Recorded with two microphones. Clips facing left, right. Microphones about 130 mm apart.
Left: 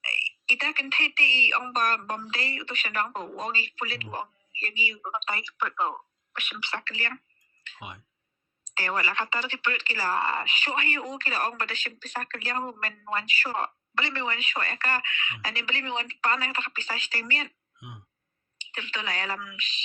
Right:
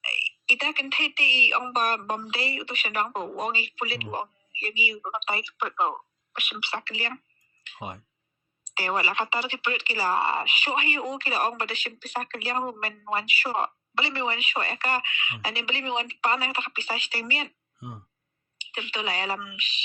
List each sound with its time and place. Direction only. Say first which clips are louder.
0.0 s speech: even; 10° right (ahead or behind)
7.8 s speech: right 6 dB; 40° right (ahead or behind)
8.7 s speech: right 2 dB; 15° right (ahead or behind)
17.7 s speech: right 6 dB; 40° right (ahead or behind)
18.6 s speech: right 3 dB; 15° right (ahead or behind)